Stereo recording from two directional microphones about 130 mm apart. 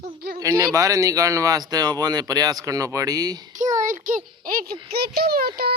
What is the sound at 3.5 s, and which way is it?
A child's voice, 80° right.